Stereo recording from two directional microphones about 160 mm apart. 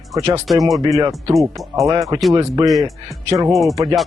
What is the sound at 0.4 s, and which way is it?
Speech, centre (ahead or behind).